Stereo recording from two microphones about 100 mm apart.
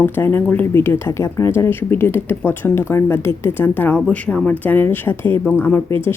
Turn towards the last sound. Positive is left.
turn(degrees=25)  # may be behind; listen again after turning